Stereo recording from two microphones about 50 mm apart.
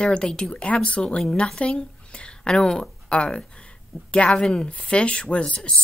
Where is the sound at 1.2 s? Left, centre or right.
Centre.